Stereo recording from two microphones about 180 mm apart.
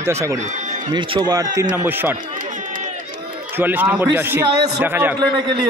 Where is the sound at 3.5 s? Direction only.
10° right (ahead or behind).